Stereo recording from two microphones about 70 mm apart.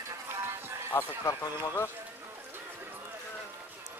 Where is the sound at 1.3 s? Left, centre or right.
Left.